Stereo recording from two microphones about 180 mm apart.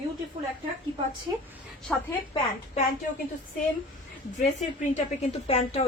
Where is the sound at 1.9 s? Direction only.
5° left (ahead or behind).